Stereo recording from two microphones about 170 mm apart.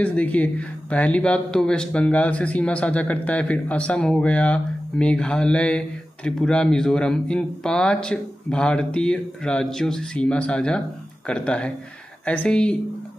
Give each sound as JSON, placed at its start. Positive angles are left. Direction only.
{"t": 0.0, "sound": "speech", "side_deg": 10}